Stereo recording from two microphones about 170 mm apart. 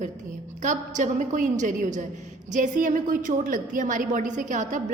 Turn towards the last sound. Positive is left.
turn(degrees=-50)  # may be behind; listen again after turning